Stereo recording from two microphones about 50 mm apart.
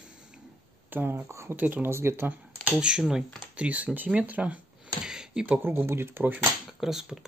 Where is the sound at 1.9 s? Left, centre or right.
Right.